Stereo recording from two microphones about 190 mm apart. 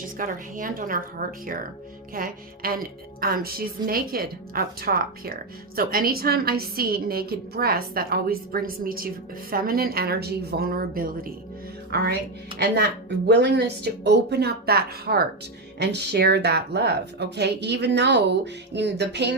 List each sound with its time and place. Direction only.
0.2 s a woman's voice: 45° right (ahead or behind)
12.5 s speech: 60° right (ahead or behind)